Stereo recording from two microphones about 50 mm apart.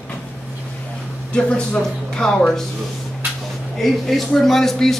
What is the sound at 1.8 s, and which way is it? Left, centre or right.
Speech, centre.